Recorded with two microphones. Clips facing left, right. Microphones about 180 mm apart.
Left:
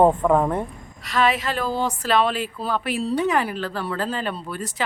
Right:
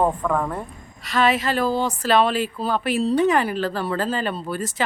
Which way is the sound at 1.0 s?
Centre (ahead or behind).